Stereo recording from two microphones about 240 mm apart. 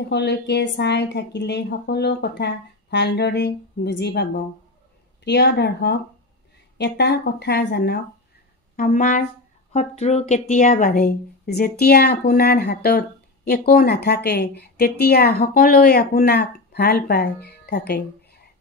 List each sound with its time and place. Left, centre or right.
0.1 s a woman's voice: left